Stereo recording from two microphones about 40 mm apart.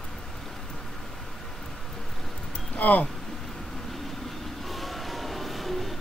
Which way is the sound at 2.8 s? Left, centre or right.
Left.